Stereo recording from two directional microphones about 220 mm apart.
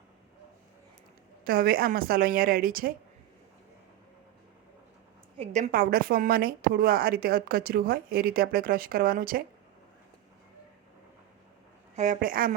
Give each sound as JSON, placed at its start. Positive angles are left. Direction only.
{"t": 1.5, "sound": "a woman's voice", "side_deg": -40}
{"t": 5.4, "sound": "a woman's voice", "side_deg": -30}
{"t": 11.9, "sound": "a woman's voice", "side_deg": -35}